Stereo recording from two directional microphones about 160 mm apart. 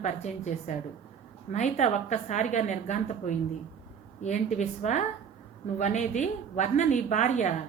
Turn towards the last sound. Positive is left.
turn(degrees=50)  # may be behind; listen again after turning